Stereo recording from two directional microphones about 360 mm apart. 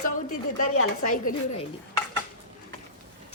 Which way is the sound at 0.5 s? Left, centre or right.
Left.